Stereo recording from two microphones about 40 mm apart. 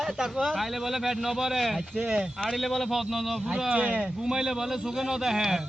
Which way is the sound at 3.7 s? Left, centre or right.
Right.